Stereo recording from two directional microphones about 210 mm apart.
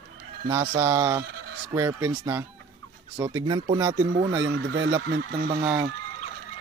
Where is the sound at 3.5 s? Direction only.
20° right (ahead or behind).